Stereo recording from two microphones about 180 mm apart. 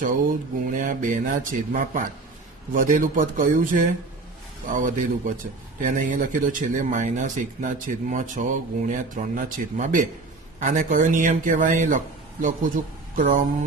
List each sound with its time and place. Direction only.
0.7 s speech: 45° right (ahead or behind)